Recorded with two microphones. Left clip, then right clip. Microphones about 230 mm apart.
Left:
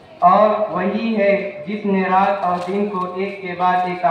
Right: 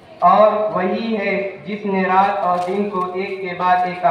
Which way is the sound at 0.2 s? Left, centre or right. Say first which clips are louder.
Right 1 dB; right.